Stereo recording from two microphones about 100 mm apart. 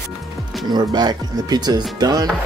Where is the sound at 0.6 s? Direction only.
45° right (ahead or behind).